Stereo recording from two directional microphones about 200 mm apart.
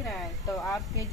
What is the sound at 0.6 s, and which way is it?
Speech, 15° left (ahead or behind).